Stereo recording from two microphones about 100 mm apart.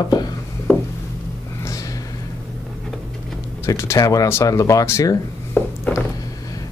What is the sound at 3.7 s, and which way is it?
Speech, 30° left (ahead or behind).